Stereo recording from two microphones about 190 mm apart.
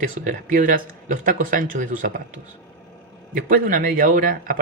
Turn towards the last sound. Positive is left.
turn(degrees=-50)  # may be behind; listen again after turning